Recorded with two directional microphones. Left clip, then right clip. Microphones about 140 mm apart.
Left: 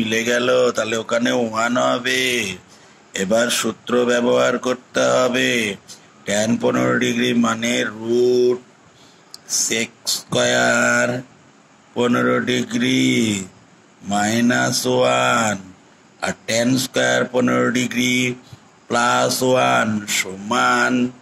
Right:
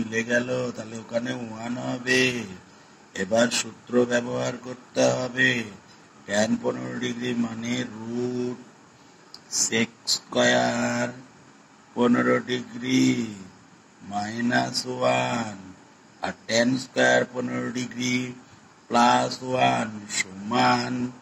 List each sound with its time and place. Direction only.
0.0 s speech: 50° left (ahead or behind)